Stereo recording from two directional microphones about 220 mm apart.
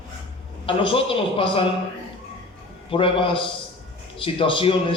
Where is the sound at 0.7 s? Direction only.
25° left (ahead or behind).